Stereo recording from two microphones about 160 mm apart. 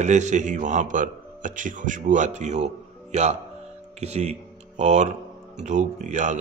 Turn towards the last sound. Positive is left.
turn(degrees=-50)  # may be behind; listen again after turning